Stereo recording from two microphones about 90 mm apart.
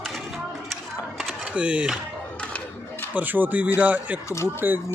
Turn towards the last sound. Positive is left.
turn(degrees=-20)  # may be behind; listen again after turning